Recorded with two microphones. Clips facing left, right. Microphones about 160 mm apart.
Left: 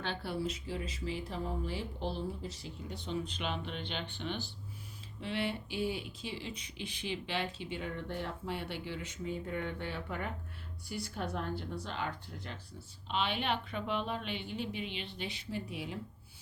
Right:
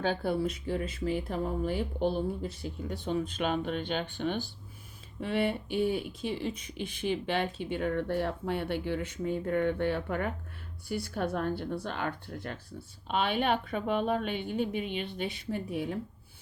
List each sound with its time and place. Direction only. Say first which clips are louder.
0.0 s speech: right 7 dB; 45° right (ahead or behind)